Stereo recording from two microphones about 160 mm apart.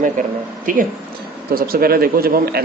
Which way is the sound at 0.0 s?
55° right (ahead or behind).